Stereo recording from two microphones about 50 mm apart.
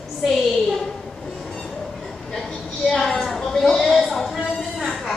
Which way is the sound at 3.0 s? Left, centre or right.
Centre.